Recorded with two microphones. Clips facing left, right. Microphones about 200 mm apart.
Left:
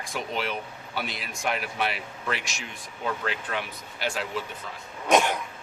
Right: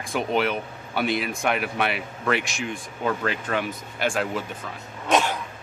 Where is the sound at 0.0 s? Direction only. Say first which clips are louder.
Right 7 dB; 55° right (ahead or behind).